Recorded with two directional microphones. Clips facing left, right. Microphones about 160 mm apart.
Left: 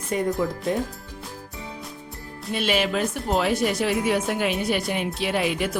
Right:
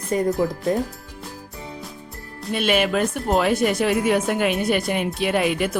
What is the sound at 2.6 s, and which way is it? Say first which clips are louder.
Speech: right 3 dB; 55° right (ahead or behind).